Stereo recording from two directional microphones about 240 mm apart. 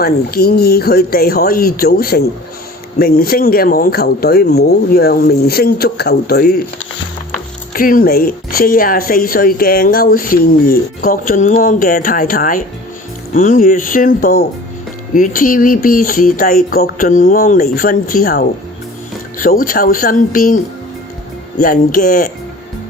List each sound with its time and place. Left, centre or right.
0.0 s a woman's voice: left
7.7 s a woman's voice: left
21.6 s a woman's voice: left